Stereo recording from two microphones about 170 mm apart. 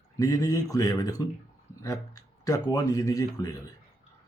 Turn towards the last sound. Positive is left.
turn(degrees=20)  # may be behind; listen again after turning